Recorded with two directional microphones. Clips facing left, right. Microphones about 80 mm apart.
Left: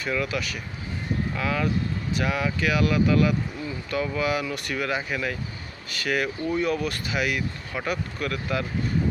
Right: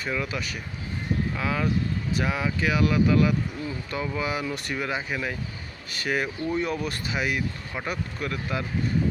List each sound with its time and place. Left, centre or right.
0.1 s speech: right
1.4 s speech: right
6.0 s speech: right